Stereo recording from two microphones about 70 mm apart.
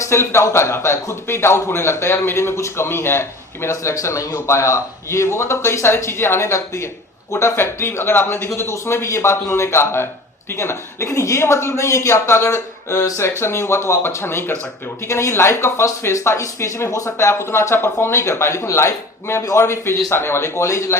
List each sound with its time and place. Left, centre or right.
0.0 s speech: left